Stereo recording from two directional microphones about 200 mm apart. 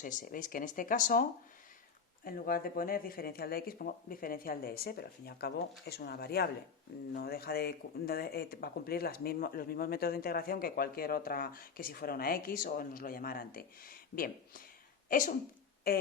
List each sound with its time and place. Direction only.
0.0 s speech: 40° left (ahead or behind)